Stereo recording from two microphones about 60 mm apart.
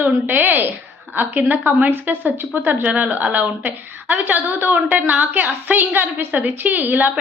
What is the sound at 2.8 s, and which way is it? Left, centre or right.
A woman's voice, right.